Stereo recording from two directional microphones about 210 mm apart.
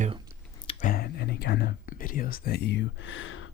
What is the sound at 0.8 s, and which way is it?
Speech, 45° left (ahead or behind).